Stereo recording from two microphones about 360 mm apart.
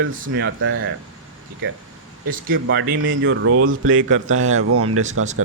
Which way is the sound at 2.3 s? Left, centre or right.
Right.